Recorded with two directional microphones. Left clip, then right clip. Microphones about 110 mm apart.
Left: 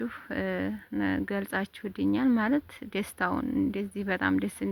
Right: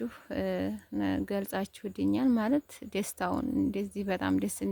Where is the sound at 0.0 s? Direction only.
25° right (ahead or behind).